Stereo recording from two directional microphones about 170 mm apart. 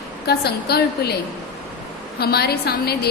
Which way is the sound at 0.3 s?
70° left (ahead or behind).